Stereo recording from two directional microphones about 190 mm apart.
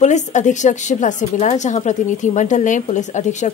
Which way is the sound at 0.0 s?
40° left (ahead or behind).